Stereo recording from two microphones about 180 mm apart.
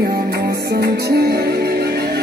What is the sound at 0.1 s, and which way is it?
Music, 60° right (ahead or behind).